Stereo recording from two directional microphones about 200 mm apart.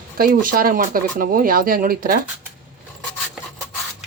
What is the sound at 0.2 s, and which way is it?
Speech, 45° right (ahead or behind).